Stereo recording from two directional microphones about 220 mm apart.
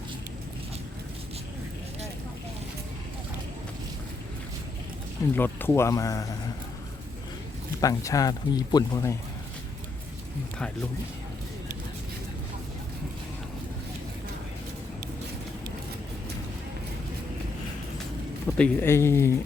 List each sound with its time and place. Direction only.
5.3 s speech: 10° left (ahead or behind)
7.8 s speech: 15° left (ahead or behind)
18.5 s speech: 5° left (ahead or behind)